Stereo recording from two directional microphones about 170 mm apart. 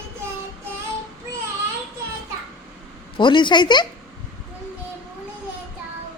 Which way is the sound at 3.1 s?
30° left (ahead or behind).